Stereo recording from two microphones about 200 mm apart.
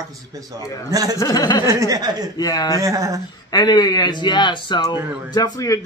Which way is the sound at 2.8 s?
15° right (ahead or behind).